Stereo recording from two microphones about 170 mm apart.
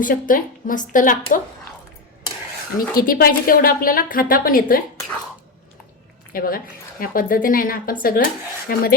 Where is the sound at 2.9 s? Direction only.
60° left (ahead or behind).